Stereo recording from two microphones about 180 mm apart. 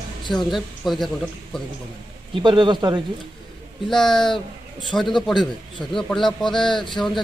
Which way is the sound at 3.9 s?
Centre (ahead or behind).